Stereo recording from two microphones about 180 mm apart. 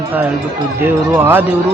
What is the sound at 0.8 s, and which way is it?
Speech, 10° right (ahead or behind).